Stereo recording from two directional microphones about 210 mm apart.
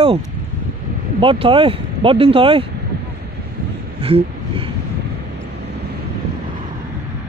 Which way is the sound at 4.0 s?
25° right (ahead or behind).